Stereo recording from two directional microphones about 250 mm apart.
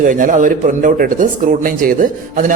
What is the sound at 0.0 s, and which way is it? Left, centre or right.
A man's voice, right.